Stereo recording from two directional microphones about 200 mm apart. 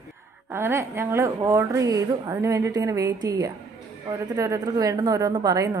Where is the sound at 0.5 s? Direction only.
10° right (ahead or behind).